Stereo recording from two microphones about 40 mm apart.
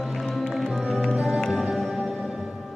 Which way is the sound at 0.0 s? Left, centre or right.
Centre.